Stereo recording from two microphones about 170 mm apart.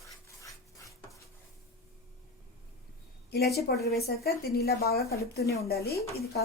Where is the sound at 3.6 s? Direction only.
65° left (ahead or behind).